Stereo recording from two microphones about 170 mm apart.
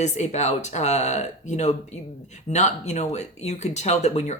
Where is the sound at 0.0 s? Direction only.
40° left (ahead or behind).